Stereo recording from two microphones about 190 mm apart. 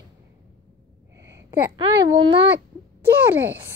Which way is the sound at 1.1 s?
15° right (ahead or behind).